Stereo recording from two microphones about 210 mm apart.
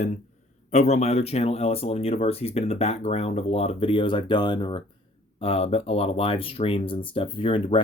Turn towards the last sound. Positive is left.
turn(degrees=25)  # may be behind; listen again after turning